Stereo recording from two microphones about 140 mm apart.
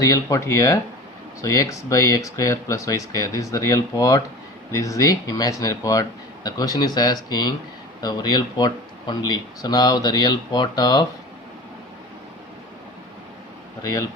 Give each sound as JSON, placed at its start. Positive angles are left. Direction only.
{"t": 0.0, "sound": "speech", "side_deg": 25}
{"t": 13.8, "sound": "speech", "side_deg": 25}